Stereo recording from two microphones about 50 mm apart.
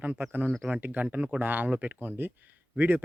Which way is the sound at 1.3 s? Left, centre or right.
Right.